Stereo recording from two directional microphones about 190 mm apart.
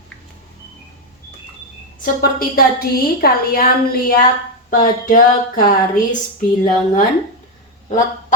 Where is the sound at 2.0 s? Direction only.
50° left (ahead or behind).